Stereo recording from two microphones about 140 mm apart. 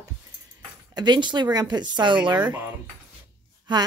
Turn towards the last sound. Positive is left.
turn(degrees=-30)  # may be behind; listen again after turning